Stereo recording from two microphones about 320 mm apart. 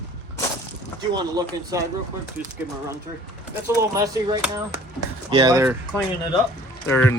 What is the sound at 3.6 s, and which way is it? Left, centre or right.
Speech, centre.